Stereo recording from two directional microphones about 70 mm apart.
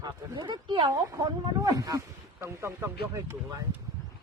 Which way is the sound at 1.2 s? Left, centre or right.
Right.